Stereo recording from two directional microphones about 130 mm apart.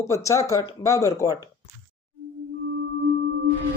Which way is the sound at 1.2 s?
25° right (ahead or behind).